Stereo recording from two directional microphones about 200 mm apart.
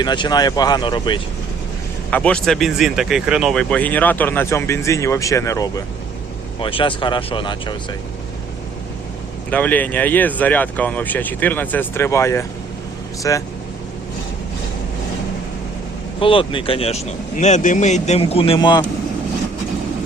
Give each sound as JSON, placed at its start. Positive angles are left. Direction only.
{"t": 0.0, "sound": "speech", "side_deg": 20}
{"t": 2.0, "sound": "speech", "side_deg": 5}
{"t": 9.5, "sound": "speech", "side_deg": 10}
{"t": 16.2, "sound": "speech", "side_deg": 25}